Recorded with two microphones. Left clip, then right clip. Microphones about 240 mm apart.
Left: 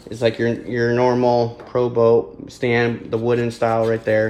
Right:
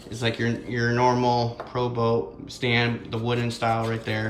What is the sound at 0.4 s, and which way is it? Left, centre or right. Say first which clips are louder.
Speech: left 7 dB; centre.